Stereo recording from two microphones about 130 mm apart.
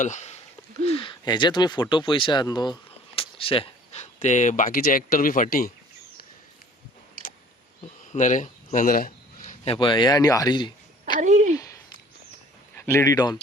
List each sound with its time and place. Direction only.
0.0 s speech: 65° left (ahead or behind)
0.9 s speech: 40° left (ahead or behind)
3.2 s speech: 45° left (ahead or behind); by 5.6 s 90° left
8.1 s a sound: 70° left (ahead or behind); by 9.6 s 85° left
9.6 s speech: 40° left (ahead or behind)
11.2 s speech: 65° right (ahead or behind)
11.5 s a sound: 25° left (ahead or behind)
12.7 s speech: 15° left (ahead or behind)